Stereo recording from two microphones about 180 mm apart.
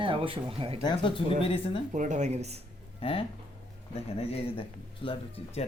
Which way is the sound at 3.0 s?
30° left (ahead or behind).